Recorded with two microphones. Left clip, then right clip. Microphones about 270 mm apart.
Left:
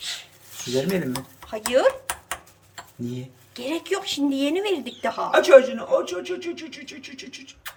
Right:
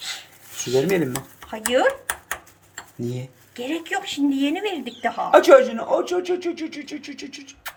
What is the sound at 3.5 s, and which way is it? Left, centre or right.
Speech, centre.